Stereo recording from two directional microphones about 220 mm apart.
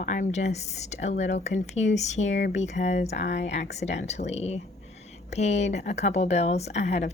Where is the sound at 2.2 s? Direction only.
55° left (ahead or behind).